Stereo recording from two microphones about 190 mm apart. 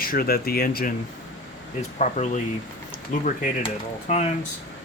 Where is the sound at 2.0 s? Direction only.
40° left (ahead or behind).